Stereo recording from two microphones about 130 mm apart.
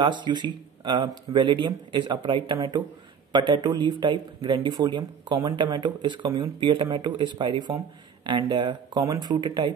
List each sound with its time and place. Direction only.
0.0 s speech: 35° right (ahead or behind)